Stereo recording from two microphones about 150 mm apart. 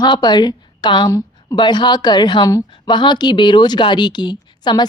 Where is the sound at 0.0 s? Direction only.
30° left (ahead or behind).